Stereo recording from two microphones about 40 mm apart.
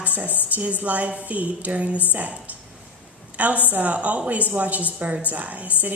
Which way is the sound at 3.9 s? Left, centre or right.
Right.